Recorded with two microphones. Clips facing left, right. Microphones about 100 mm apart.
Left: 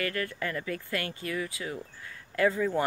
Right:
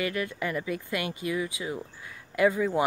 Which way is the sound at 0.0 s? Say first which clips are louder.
Right 2 dB; 15° right (ahead or behind).